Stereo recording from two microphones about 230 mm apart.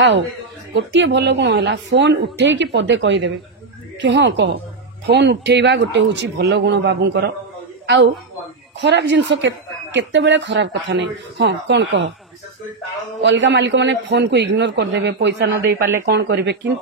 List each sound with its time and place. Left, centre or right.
0.7 s a woman's voice: right
13.2 s a woman's voice: right